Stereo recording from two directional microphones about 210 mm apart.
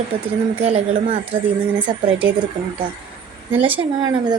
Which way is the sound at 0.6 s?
30° right (ahead or behind).